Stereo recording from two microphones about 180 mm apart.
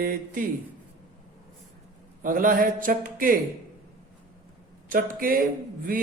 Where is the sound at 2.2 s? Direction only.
50° right (ahead or behind).